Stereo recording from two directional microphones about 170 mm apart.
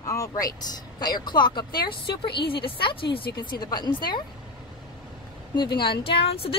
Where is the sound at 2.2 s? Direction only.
70° left (ahead or behind).